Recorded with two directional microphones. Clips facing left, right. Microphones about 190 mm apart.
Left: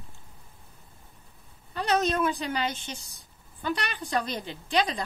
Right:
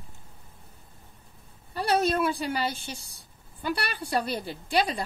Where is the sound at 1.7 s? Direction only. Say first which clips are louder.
Right 1 dB; 10° right (ahead or behind).